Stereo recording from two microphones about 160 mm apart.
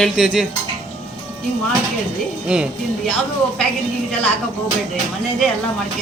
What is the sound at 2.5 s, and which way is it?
Speech, 5° right (ahead or behind).